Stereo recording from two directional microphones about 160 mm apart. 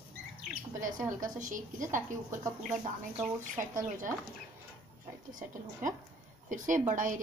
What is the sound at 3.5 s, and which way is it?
Speech, 55° right (ahead or behind).